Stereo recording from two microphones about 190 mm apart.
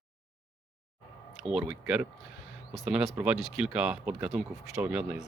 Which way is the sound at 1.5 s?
5° right (ahead or behind).